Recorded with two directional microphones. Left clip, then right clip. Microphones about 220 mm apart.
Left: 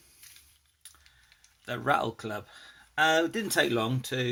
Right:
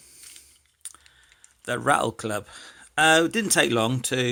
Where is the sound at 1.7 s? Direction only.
35° right (ahead or behind).